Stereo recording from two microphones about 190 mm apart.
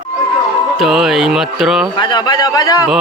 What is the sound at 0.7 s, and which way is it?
Speech, centre (ahead or behind).